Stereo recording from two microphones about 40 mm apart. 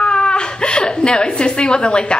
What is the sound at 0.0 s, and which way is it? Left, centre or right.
A woman's voice, left.